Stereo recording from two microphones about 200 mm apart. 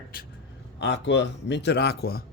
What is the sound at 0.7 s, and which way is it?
A man's voice, 60° left (ahead or behind).